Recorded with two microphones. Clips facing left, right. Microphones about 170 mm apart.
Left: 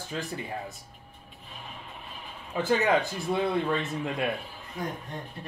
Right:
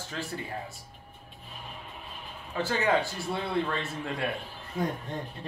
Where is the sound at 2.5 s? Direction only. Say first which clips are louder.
Left 2 dB; 20° left (ahead or behind).